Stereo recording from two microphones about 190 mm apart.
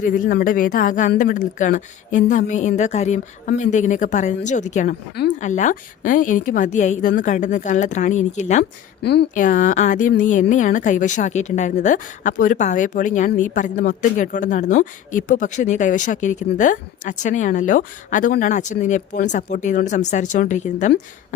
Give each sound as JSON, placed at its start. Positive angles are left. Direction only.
{"t": 0.0, "sound": "a woman's voice", "side_deg": 45}
{"t": 9.0, "sound": "speech", "side_deg": 60}
{"t": 9.3, "sound": "a woman's voice", "side_deg": 45}